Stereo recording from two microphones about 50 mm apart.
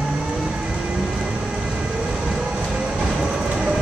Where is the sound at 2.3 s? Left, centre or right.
Centre.